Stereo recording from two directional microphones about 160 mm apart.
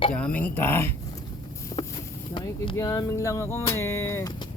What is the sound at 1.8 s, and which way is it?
Boat, 35° left (ahead or behind).